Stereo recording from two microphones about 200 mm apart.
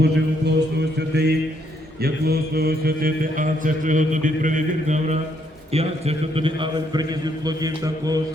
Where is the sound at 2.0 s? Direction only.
50° right (ahead or behind).